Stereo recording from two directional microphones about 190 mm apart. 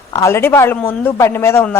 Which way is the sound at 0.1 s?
15° left (ahead or behind).